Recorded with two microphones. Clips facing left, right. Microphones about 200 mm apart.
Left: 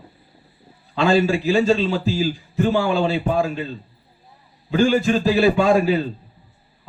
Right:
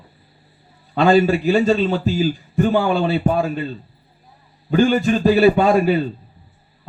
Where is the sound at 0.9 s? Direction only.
50° right (ahead or behind).